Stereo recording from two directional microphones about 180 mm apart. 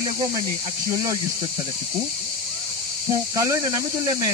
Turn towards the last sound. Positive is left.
turn(degrees=-20)  # may be behind; listen again after turning